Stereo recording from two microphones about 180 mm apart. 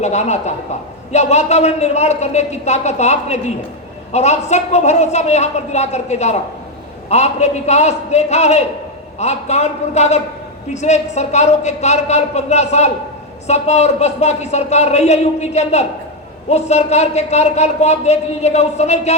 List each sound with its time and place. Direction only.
0.0 s a woman's voice: 40° left (ahead or behind)